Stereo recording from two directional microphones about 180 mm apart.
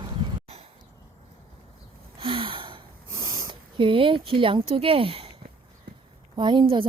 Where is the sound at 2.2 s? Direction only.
30° right (ahead or behind).